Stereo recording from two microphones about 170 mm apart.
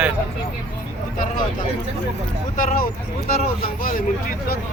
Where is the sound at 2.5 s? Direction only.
55° left (ahead or behind).